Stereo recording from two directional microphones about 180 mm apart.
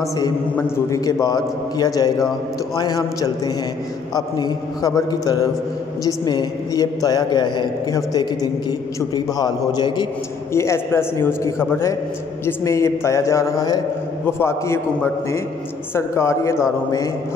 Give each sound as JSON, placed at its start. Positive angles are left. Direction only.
{"t": 0.2, "sound": "a woman's voice", "side_deg": 15}
{"t": 15.9, "sound": "a man's voice", "side_deg": 15}